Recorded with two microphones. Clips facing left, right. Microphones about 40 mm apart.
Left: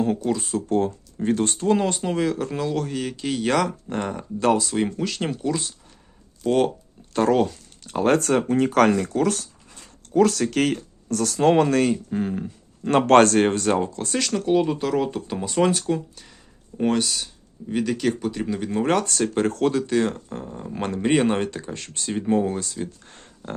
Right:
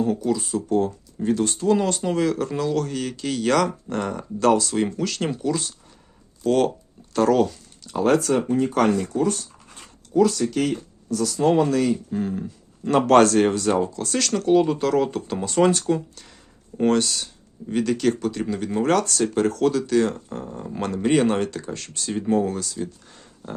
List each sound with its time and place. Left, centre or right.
0.3 s speech: left
1.7 s speech: centre
4.7 s speech: centre
7.1 s speech: left
8.5 s speech: left
10.2 s speech: left
12.1 s speech: left
12.9 s speech: left
14.1 s speech: centre
14.3 s speech: centre
18.8 s speech: left
20.4 s speech: centre
20.8 s speech: left